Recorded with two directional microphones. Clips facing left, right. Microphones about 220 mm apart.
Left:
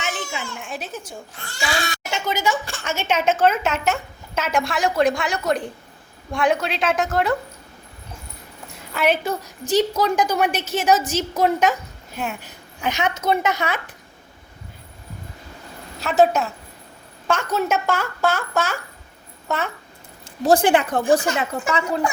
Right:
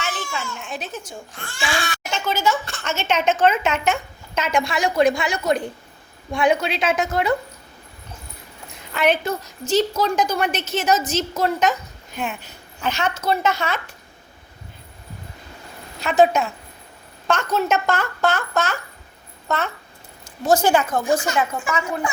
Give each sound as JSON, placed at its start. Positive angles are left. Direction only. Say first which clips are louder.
{"t": 0.0, "sound": "a sound", "louder": "even", "side_deg": 20}
{"t": 1.5, "sound": "a woman's voice", "louder": "even", "side_deg": 40}
{"t": 2.0, "sound": "a woman's voice", "louder": "right 1 dB", "side_deg": 15}
{"t": 8.9, "sound": "a woman's voice", "louder": "right 1 dB", "side_deg": 5}
{"t": 16.0, "sound": "a woman's voice", "louder": "right 1 dB", "side_deg": 5}
{"t": 20.5, "sound": "a woman's voice", "louder": "left 1 dB", "side_deg": 30}